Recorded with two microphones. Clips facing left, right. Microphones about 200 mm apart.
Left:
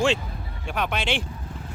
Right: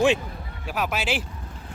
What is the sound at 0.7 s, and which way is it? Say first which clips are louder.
Speech: even; 5° right (ahead or behind).